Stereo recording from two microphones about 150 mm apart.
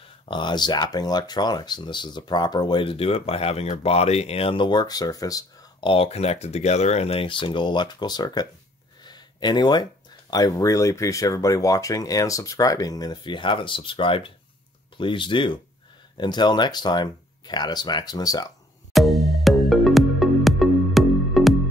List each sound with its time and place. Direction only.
0.3 s speech: 30° left (ahead or behind)
9.0 s a sound: 30° left (ahead or behind)
10.3 s speech: 25° left (ahead or behind)
18.9 s music: centre (ahead or behind)